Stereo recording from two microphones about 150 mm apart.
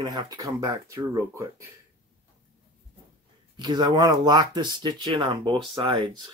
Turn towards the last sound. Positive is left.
turn(degrees=-30)  # may be behind; listen again after turning